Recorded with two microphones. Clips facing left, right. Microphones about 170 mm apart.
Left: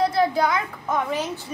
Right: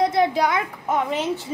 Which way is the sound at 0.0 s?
20° right (ahead or behind).